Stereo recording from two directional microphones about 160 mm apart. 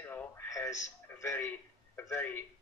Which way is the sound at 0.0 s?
10° left (ahead or behind).